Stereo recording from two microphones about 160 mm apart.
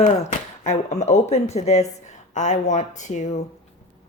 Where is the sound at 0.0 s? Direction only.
50° left (ahead or behind).